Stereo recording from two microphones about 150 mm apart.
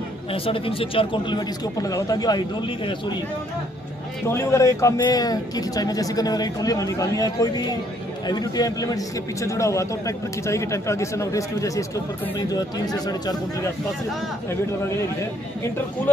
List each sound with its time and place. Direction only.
0.3 s speech: 40° left (ahead or behind)
1.8 s a man's voice: 25° left (ahead or behind)
4.3 s a man's voice: 20° left (ahead or behind)